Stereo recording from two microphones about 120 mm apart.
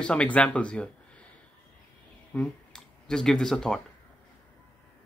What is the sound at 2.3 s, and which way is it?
Speech, 5° left (ahead or behind).